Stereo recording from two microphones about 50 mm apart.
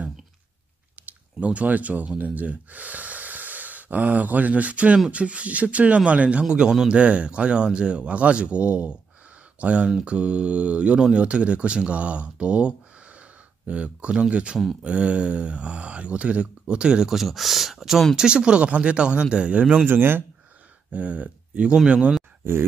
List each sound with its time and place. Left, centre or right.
1.0 s speech: right
17.1 s speech: centre
18.1 s speech: centre
19.5 s speech: right
19.9 s speech: right
20.9 s speech: right
22.4 s speech: right